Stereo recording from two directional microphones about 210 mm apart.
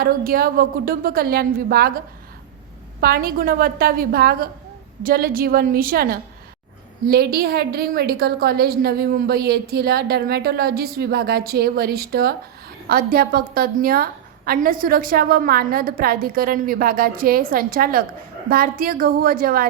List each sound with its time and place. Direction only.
0.0 s a woman's voice: 45° right (ahead or behind)
3.0 s a woman's voice: 45° right (ahead or behind)